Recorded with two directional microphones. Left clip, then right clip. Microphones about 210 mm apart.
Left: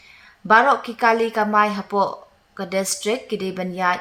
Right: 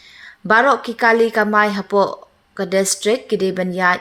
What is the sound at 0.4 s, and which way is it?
A woman's voice, 20° right (ahead or behind).